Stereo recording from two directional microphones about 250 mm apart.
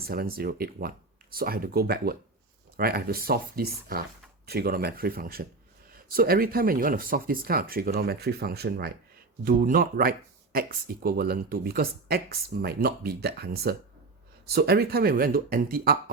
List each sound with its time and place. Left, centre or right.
0.0 s speech: right